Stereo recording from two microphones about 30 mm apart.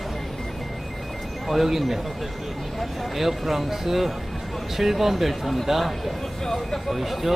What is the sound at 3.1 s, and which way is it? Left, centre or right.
Speech, centre.